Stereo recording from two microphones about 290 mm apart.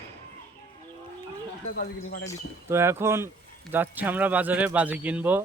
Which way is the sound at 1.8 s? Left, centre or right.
Left.